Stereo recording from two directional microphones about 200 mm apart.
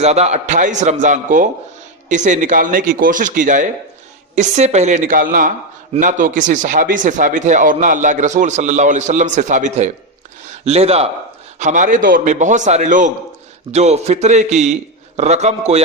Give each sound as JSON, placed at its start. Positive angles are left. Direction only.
{"t": 0.0, "sound": "speech", "side_deg": -35}